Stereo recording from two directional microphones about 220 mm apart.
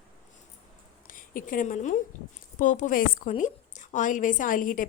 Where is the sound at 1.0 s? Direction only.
40° left (ahead or behind).